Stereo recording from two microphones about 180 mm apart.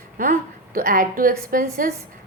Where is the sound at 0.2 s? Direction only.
50° right (ahead or behind).